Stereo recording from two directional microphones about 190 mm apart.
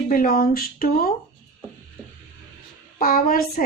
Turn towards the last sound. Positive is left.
turn(degrees=50)  # may be behind; listen again after turning